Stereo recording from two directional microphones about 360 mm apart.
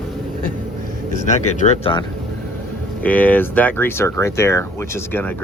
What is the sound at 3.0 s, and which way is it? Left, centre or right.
Speech, centre.